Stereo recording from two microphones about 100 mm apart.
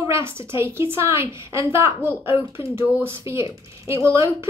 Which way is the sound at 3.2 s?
30° right (ahead or behind).